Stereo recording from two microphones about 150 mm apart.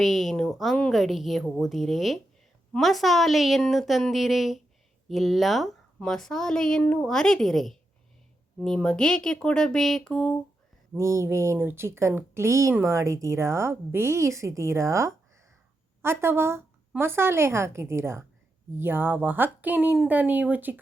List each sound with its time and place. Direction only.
0.0 s speech: centre (ahead or behind)
10.9 s speech: 20° right (ahead or behind)